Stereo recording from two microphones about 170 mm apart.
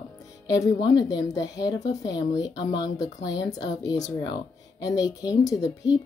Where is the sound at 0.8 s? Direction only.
20° left (ahead or behind).